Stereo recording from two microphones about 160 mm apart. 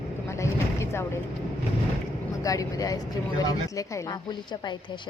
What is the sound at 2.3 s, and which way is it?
A woman's voice, 20° left (ahead or behind).